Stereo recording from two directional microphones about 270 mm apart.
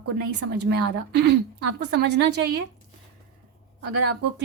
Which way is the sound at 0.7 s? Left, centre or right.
Right.